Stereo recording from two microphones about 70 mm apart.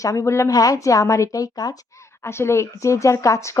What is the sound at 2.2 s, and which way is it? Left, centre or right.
A woman's voice, left.